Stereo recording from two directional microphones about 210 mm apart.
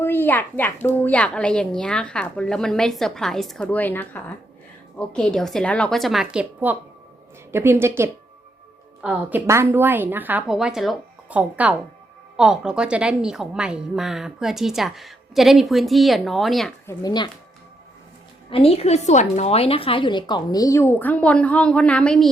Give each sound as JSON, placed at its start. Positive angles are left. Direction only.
{"t": 0.0, "sound": "a woman's voice", "side_deg": 10}
{"t": 16.8, "sound": "a woman's voice", "side_deg": 20}
{"t": 18.5, "sound": "a woman's voice", "side_deg": 30}